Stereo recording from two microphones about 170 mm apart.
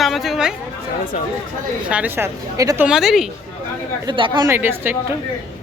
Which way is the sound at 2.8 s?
Centre (ahead or behind).